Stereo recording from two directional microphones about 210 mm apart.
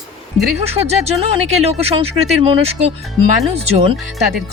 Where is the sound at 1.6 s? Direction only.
30° right (ahead or behind).